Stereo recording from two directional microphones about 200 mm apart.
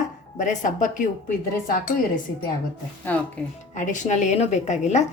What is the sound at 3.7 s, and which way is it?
A woman's voice, 35° left (ahead or behind).